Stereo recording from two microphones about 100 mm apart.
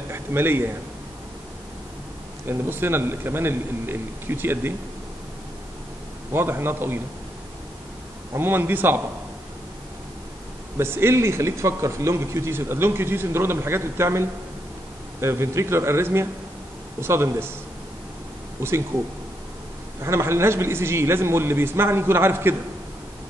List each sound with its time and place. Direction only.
0.1 s a man's voice: 25° right (ahead or behind)
2.4 s speech: 20° right (ahead or behind)
6.3 s speech: 20° right (ahead or behind)
8.3 s speech: 20° right (ahead or behind)
10.8 s speech: 25° right (ahead or behind)
20.0 s speech: 30° right (ahead or behind)